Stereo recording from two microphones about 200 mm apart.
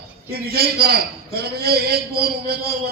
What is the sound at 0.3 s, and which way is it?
A man's voice, 50° right (ahead or behind).